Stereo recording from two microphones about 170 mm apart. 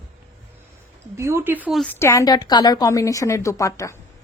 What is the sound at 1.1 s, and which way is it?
Speech, 15° right (ahead or behind).